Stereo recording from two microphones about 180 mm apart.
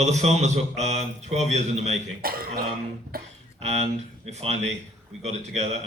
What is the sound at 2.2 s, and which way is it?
Speech, 55° right (ahead or behind).